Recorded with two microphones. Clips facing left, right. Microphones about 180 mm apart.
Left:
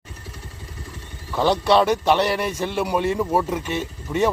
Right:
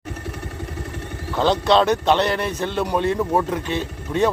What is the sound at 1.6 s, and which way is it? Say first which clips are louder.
Speech: even; 10° left (ahead or behind).